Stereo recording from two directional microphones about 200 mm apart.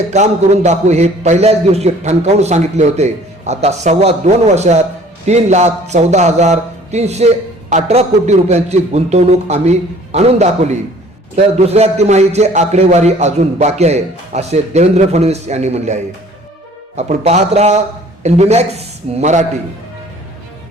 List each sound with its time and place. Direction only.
0.1 s a man's voice: 35° right (ahead or behind)
17.0 s a man's voice: 35° right (ahead or behind)